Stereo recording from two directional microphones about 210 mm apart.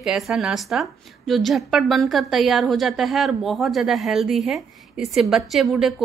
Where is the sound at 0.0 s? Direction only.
Centre (ahead or behind).